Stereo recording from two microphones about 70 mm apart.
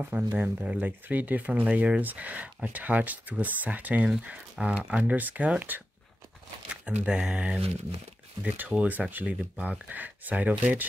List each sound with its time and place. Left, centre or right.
0.3 s speech: right
6.7 s speech: centre